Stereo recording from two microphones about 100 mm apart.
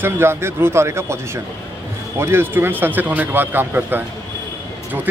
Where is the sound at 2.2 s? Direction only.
25° right (ahead or behind).